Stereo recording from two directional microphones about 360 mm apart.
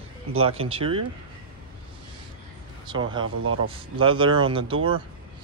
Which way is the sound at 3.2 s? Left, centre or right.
Right.